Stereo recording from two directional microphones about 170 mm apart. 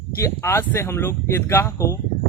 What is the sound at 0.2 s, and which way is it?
Speech, 15° left (ahead or behind).